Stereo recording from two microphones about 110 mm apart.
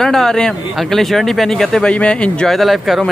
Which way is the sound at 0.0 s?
5° left (ahead or behind).